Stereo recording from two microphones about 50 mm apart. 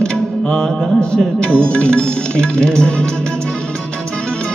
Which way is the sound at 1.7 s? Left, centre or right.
Centre.